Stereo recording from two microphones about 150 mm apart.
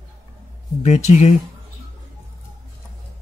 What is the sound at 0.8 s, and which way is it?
Speech, 50° left (ahead or behind).